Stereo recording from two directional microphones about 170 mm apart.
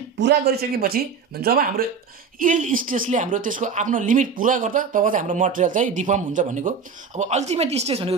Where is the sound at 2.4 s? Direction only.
50° right (ahead or behind).